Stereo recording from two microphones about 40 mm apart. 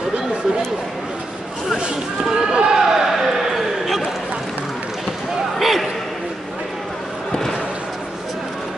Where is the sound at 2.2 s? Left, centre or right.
Centre.